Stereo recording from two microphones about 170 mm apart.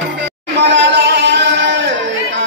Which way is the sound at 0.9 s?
90° right.